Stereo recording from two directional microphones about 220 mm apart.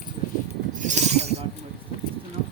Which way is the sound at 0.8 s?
35° right (ahead or behind).